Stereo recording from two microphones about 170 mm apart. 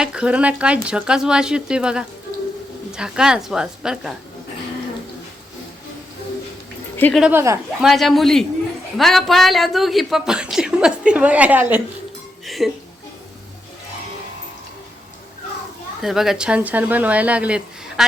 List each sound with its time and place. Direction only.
0.0 s speech: 5° right (ahead or behind)
7.1 s speech: 5° right (ahead or behind)
7.3 s speech: 15° right (ahead or behind)
7.8 s speech: centre (ahead or behind)
12.5 s music: centre (ahead or behind)
16.0 s speech: centre (ahead or behind)